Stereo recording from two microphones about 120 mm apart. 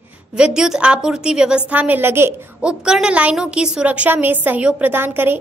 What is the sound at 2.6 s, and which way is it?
A woman's voice, 5° right (ahead or behind).